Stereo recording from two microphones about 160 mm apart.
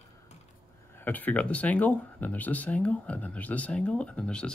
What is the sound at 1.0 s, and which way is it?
Speech, 10° left (ahead or behind).